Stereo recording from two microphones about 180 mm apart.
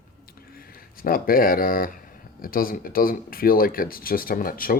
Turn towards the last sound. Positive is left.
turn(degrees=55)  # may be behind; listen again after turning